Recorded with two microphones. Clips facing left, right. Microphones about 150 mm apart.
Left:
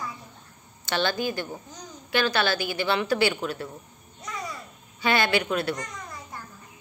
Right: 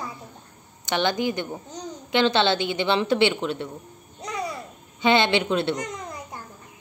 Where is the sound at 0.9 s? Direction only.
20° right (ahead or behind).